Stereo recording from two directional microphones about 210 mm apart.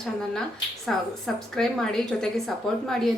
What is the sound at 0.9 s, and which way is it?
Speech, centre (ahead or behind).